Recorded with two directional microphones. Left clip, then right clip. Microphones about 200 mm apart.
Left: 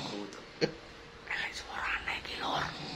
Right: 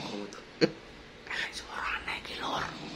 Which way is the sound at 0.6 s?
55° right (ahead or behind).